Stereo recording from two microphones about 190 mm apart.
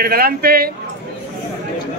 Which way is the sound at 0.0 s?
55° right (ahead or behind).